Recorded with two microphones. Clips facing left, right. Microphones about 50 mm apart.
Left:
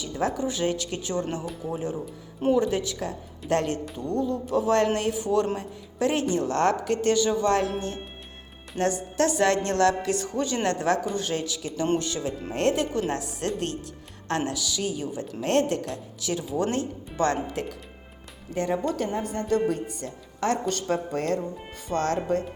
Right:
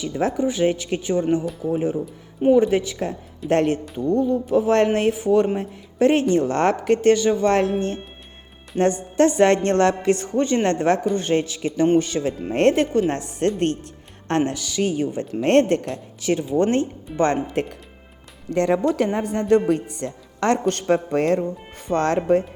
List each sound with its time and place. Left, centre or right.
0.0 s speech: right
1.4 s speech: centre
1.7 s speech: right
6.0 s a woman's voice: right
8.8 s a woman's voice: right
13.1 s a woman's voice: right
17.1 s speech: centre
17.5 s a woman's voice: right
18.5 s speech: right